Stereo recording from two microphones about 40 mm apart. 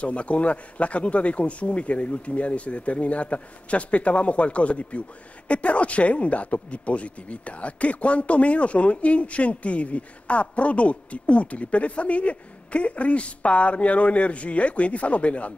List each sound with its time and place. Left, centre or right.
0.0 s a man's voice: left